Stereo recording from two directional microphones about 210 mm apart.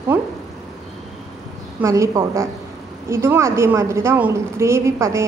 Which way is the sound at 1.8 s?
15° right (ahead or behind).